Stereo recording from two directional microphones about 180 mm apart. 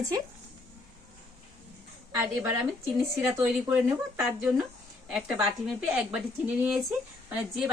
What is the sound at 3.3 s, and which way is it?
A woman's voice, 5° right (ahead or behind).